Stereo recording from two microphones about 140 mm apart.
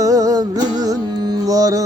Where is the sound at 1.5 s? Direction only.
25° right (ahead or behind).